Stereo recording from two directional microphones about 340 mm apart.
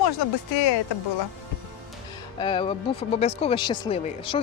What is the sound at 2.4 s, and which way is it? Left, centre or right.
Speech, centre.